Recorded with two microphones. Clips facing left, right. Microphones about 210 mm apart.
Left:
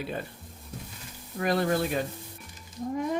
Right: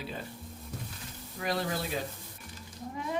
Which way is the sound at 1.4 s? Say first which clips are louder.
Left 7 dB; 55° left (ahead or behind).